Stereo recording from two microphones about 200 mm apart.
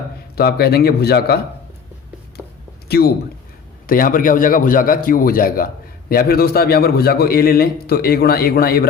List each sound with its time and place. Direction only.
0.3 s a man's voice: 50° left (ahead or behind)
2.9 s a man's voice: 50° left (ahead or behind)